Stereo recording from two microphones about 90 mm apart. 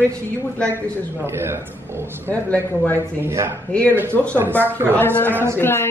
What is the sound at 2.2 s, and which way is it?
Speech, 15° left (ahead or behind).